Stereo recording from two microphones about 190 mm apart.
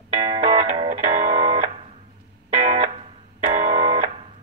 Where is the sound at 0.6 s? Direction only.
35° right (ahead or behind).